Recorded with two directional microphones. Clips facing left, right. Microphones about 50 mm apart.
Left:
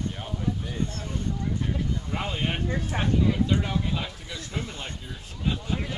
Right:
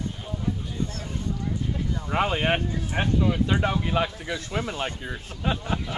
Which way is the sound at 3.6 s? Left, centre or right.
Right.